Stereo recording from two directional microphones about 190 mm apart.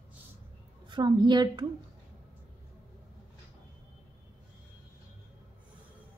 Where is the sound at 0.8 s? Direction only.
25° right (ahead or behind).